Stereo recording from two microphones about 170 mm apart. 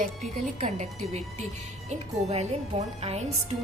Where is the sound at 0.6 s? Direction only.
45° right (ahead or behind).